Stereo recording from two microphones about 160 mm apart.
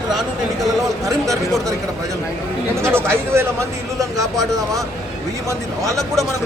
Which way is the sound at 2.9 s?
15° right (ahead or behind).